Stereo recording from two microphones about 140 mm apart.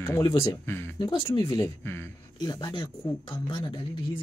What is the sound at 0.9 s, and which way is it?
Speech, 35° left (ahead or behind).